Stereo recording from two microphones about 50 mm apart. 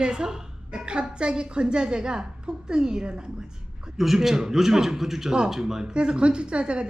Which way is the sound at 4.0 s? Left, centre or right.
Centre.